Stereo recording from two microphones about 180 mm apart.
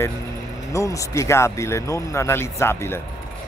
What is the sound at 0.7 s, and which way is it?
Speech, 15° left (ahead or behind).